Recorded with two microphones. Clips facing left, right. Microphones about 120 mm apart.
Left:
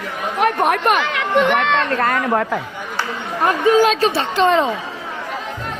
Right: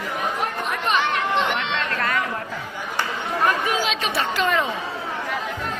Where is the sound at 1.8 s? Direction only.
45° left (ahead or behind).